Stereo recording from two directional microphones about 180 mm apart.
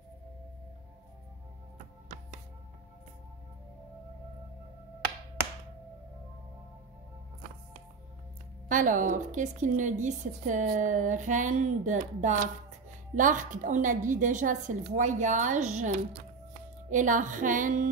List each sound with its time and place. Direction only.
8.6 s a woman's voice: 45° right (ahead or behind)